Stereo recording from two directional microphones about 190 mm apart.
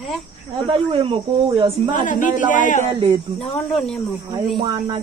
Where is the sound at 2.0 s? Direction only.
45° left (ahead or behind).